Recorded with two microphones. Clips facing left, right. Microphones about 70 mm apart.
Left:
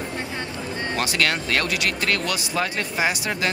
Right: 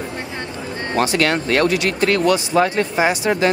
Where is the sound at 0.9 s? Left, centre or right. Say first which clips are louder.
Right 7 dB; right.